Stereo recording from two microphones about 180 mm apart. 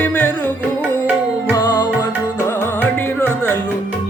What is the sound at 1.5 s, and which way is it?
Music, 20° left (ahead or behind).